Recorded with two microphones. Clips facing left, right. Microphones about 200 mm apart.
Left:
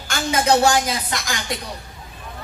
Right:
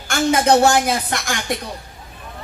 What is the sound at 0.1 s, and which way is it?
Speech, 55° right (ahead or behind).